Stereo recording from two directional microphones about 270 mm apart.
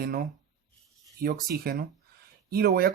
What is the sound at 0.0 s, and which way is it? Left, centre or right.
Speech, right.